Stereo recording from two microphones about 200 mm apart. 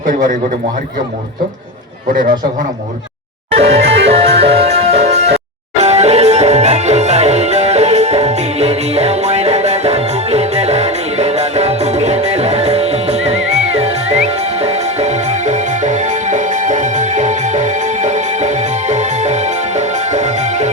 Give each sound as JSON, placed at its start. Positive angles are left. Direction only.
{"t": 0.1, "sound": "a man's voice", "side_deg": -40}
{"t": 3.5, "sound": "music", "side_deg": -30}